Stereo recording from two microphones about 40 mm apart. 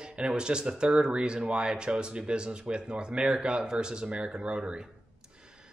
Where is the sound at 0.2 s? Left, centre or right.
Right.